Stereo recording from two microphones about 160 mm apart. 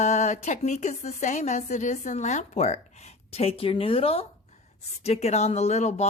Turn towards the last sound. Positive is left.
turn(degrees=45)  # may be behind; listen again after turning